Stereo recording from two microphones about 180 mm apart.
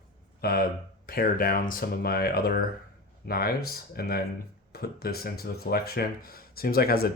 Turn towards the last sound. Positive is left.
turn(degrees=60)  # may be behind; listen again after turning